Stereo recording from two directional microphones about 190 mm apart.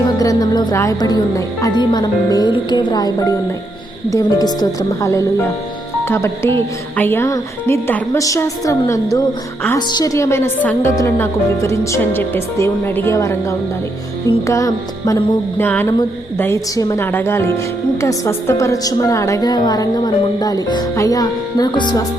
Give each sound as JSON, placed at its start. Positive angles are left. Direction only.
{"t": 0.0, "sound": "music", "side_deg": 20}
{"t": 1.6, "sound": "a woman's voice", "side_deg": 25}